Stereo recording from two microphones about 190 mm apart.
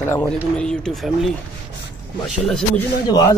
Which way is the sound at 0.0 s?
10° left (ahead or behind).